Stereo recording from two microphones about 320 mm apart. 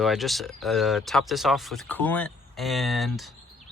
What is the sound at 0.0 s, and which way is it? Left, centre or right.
Speech, centre.